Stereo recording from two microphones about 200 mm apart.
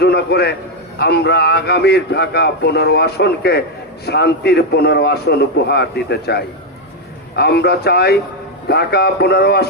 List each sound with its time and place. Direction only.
0.0 s a man's voice: 55° left (ahead or behind)